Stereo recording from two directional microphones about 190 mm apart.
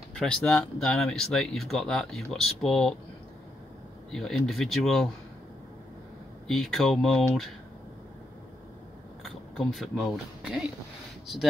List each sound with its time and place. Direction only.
0.1 s speech: 5° left (ahead or behind)
4.1 s speech: centre (ahead or behind)
6.4 s speech: centre (ahead or behind)
9.2 s speech: centre (ahead or behind)